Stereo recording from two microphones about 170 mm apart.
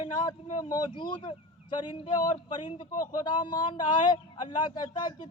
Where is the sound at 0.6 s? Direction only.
25° left (ahead or behind).